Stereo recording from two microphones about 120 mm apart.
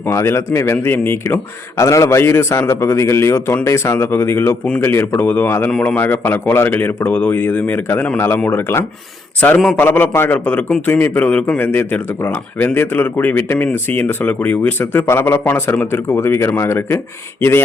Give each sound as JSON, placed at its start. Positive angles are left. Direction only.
{"t": 0.0, "sound": "a man's voice", "side_deg": 20}